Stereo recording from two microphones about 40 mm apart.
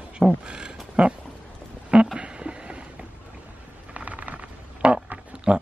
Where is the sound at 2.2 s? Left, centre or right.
Right.